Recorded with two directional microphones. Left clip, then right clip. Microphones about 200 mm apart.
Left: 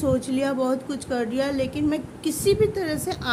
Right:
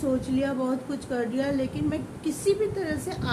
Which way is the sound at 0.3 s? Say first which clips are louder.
Left 4 dB; 55° left (ahead or behind).